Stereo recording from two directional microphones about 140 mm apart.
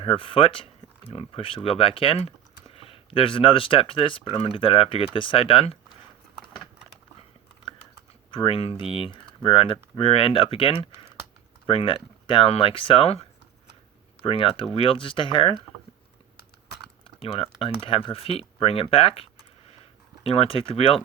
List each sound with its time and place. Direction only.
0.0 s speech: 40° left (ahead or behind)
8.3 s speech: 40° left (ahead or behind)
17.0 s speech: 40° left (ahead or behind)